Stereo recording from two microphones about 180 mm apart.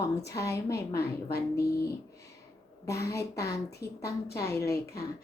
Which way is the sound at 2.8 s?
15° left (ahead or behind).